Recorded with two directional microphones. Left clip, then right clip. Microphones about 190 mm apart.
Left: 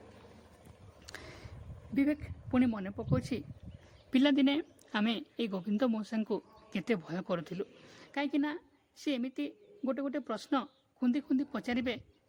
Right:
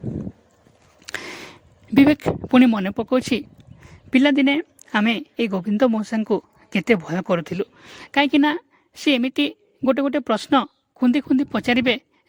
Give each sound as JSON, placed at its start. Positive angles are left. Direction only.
{"t": 1.0, "sound": "a sound", "side_deg": -50}
{"t": 2.0, "sound": "speech", "side_deg": -60}
{"t": 4.1, "sound": "speech", "side_deg": -35}